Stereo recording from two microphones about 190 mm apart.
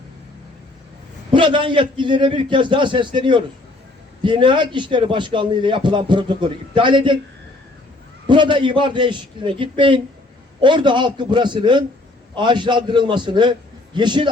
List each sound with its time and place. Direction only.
1.3 s a man's voice: 25° right (ahead or behind)
8.3 s a man's voice: 25° right (ahead or behind)